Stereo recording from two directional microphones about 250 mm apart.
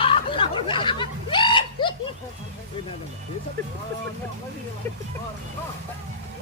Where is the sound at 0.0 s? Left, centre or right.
Left.